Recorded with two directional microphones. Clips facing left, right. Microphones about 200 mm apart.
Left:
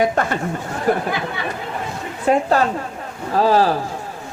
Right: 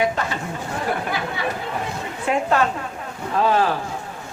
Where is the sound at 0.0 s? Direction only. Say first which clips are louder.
Left 4 dB; 50° left (ahead or behind).